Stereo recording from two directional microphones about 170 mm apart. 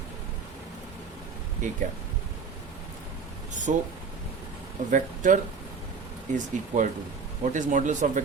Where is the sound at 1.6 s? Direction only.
50° right (ahead or behind).